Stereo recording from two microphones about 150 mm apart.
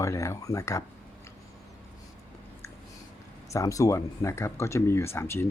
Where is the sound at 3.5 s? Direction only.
20° left (ahead or behind).